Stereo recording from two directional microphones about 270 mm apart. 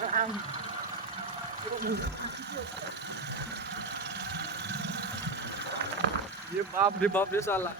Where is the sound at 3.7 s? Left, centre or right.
Right.